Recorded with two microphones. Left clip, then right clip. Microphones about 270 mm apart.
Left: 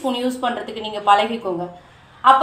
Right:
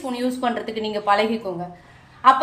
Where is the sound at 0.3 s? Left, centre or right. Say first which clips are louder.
Left 1 dB; right.